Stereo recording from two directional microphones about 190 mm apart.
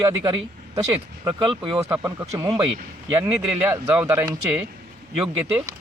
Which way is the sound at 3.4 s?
10° right (ahead or behind).